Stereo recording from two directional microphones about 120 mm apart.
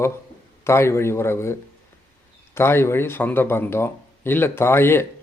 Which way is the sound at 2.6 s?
20° left (ahead or behind).